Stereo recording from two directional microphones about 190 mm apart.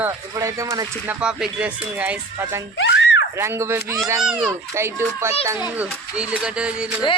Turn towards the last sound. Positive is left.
turn(degrees=-5)  # may be behind; listen again after turning